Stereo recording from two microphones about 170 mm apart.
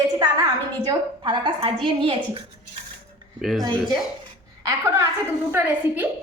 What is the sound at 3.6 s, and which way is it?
A woman's voice, 25° right (ahead or behind).